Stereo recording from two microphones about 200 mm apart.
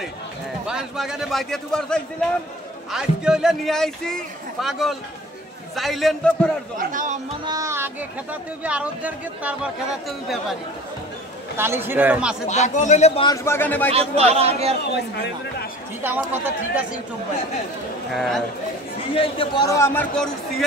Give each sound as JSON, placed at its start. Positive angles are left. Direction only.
{"t": 0.7, "sound": "speech", "side_deg": -5}
{"t": 6.8, "sound": "speech", "side_deg": -40}
{"t": 7.4, "sound": "speech", "side_deg": -15}
{"t": 11.5, "sound": "speech", "side_deg": -10}
{"t": 12.4, "sound": "a man's voice", "side_deg": 35}
{"t": 13.4, "sound": "a man's voice", "side_deg": 10}
{"t": 13.9, "sound": "speech", "side_deg": -30}
{"t": 16.0, "sound": "speech", "side_deg": -10}
{"t": 18.1, "sound": "speech", "side_deg": 0}
{"t": 19.1, "sound": "a man's voice", "side_deg": 25}